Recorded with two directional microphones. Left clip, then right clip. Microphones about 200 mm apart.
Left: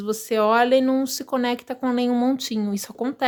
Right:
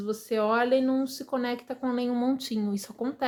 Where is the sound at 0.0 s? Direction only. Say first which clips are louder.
Left 6 dB; 35° left (ahead or behind).